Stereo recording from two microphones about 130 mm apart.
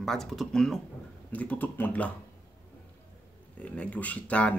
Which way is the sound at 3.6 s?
10° left (ahead or behind).